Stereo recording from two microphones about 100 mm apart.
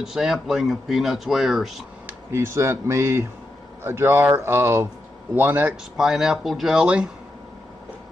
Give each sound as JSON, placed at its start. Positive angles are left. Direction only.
{"t": 0.0, "sound": "speech", "side_deg": -5}
{"t": 2.0, "sound": "speech", "side_deg": -25}
{"t": 5.9, "sound": "speech", "side_deg": -5}